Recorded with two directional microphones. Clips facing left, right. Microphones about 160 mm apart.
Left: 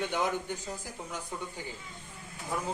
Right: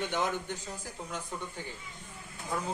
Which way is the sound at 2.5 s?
10° left (ahead or behind).